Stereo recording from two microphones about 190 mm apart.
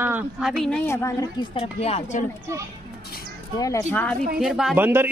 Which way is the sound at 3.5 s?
15° left (ahead or behind).